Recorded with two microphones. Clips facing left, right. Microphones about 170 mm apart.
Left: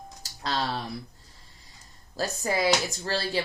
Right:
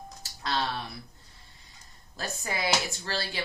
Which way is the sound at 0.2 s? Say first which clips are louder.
Left 1 dB; 35° left (ahead or behind).